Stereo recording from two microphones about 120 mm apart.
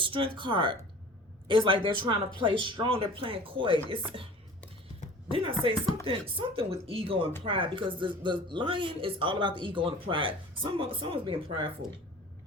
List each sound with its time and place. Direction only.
0.0 s speech: 45° right (ahead or behind)
5.3 s speech: 45° right (ahead or behind)